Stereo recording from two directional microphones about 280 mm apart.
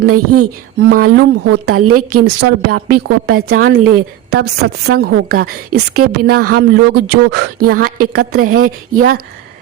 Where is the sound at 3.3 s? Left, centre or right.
Right.